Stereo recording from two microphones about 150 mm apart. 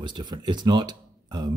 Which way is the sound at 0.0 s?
30° right (ahead or behind).